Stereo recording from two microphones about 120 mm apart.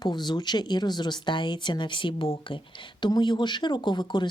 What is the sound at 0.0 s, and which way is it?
Speech, 35° left (ahead or behind).